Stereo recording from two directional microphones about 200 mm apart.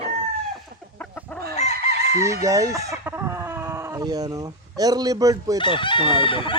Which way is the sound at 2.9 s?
10° right (ahead or behind).